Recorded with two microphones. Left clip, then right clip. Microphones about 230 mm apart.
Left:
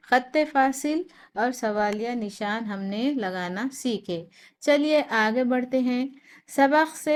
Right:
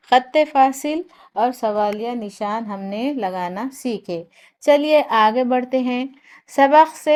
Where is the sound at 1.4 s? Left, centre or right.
Right.